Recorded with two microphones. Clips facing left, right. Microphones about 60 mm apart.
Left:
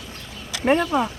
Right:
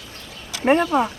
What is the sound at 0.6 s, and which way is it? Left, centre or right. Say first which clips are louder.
Speech: right 2 dB; centre.